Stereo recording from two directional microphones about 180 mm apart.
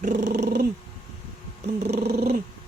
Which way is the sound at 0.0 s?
45° right (ahead or behind).